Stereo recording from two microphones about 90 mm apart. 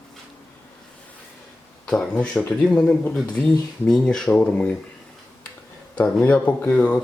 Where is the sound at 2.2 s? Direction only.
15° left (ahead or behind).